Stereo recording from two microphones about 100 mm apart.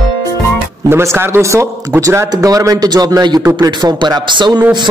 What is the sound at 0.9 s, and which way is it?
A man's voice, 25° right (ahead or behind).